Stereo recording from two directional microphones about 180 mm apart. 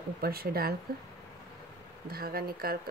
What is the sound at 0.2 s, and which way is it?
Speech, 55° right (ahead or behind).